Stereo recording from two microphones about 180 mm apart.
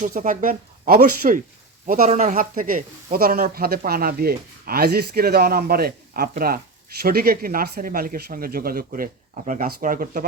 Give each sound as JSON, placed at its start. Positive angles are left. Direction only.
{"t": 0.0, "sound": "speech", "side_deg": -45}